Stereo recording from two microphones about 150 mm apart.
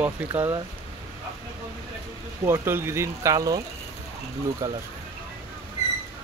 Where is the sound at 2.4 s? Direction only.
15° right (ahead or behind).